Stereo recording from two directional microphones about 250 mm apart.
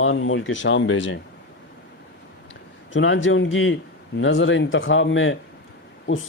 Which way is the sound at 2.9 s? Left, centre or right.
Left.